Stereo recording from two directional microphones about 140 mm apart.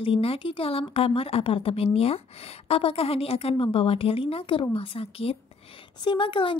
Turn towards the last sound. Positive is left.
turn(degrees=35)  # may be behind; listen again after turning